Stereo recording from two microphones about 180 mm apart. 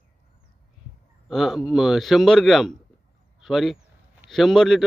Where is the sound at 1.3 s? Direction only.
Centre (ahead or behind).